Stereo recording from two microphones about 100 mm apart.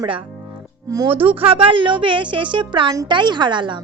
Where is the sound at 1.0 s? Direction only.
65° right (ahead or behind).